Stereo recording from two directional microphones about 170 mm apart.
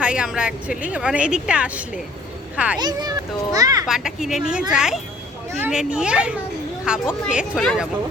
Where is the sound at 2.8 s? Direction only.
25° right (ahead or behind).